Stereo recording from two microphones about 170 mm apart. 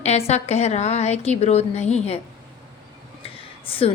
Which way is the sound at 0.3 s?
40° left (ahead or behind).